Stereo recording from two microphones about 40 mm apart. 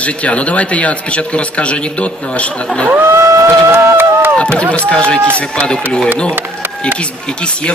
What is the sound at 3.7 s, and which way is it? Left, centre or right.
Run, right.